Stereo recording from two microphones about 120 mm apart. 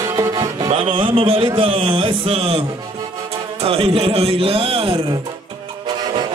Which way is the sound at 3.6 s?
50° right (ahead or behind).